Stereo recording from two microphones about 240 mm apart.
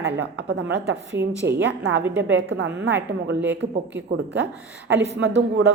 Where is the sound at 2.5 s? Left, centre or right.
Right.